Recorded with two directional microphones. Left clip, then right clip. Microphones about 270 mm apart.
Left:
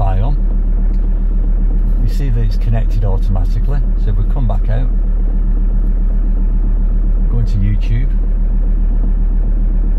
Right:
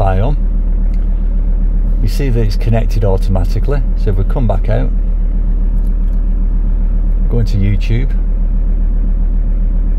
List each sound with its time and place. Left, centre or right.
0.0 s vehicle: right
2.1 s speech: right
7.3 s speech: right